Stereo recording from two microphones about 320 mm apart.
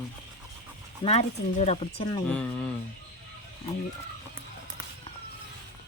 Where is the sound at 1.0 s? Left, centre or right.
Centre.